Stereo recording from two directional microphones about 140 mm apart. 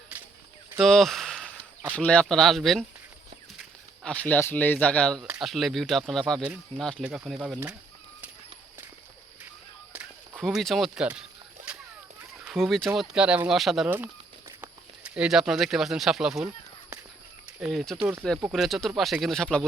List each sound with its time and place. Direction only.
0.8 s speech: centre (ahead or behind)
10.3 s speech: centre (ahead or behind)
11.7 s a sound: 5° right (ahead or behind)
12.5 s speech: centre (ahead or behind)
17.6 s speech: centre (ahead or behind)